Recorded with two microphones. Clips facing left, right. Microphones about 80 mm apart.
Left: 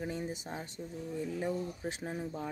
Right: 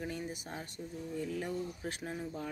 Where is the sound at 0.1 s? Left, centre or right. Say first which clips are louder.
Left 2 dB; left.